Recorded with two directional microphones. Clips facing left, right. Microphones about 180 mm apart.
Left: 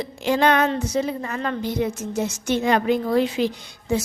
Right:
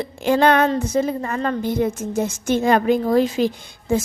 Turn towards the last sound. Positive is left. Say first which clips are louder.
# right 3 dB
turn(degrees=-50)  # may be behind; listen again after turning